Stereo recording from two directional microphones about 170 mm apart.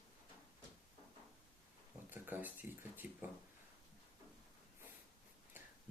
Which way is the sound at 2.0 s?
10° right (ahead or behind).